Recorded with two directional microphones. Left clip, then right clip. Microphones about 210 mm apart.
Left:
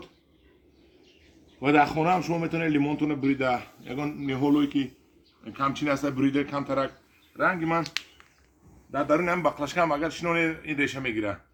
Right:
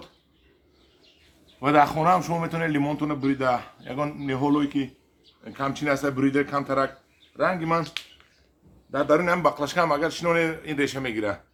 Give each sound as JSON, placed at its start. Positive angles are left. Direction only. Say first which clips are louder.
{"t": 1.6, "sound": "a man's voice", "louder": "right 3 dB", "side_deg": -10}
{"t": 8.9, "sound": "a man's voice", "louder": "right 3 dB", "side_deg": -10}